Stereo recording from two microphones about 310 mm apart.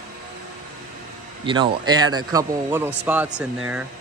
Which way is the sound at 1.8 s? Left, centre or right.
Centre.